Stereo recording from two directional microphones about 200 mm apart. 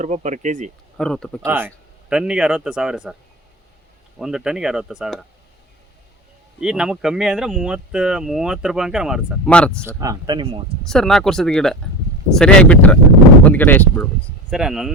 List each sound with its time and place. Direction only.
0.0 s speech: 35° right (ahead or behind)
0.9 s speech: 5° left (ahead or behind)
1.5 s speech: 10° right (ahead or behind)
4.2 s speech: 5° right (ahead or behind)
6.6 s speech: 5° right (ahead or behind)
10.0 s speech: 20° right (ahead or behind)
10.8 s speech: centre (ahead or behind)
14.5 s speech: centre (ahead or behind)